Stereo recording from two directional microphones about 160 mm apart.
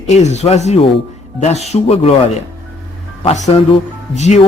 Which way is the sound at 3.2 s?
40° left (ahead or behind).